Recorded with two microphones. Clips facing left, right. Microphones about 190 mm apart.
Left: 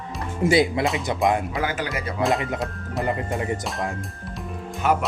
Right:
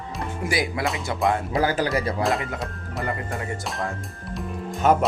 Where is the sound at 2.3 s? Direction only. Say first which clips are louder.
Left 2 dB; 20° left (ahead or behind).